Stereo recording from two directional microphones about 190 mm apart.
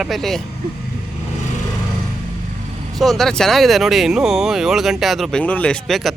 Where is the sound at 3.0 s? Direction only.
Centre (ahead or behind).